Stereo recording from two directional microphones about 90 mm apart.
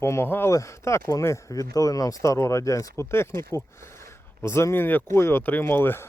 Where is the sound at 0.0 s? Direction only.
30° left (ahead or behind).